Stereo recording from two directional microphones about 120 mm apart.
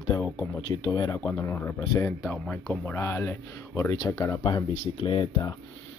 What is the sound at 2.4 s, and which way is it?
Speech, 10° left (ahead or behind).